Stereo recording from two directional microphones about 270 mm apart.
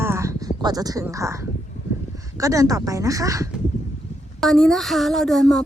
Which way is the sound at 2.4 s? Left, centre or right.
Centre.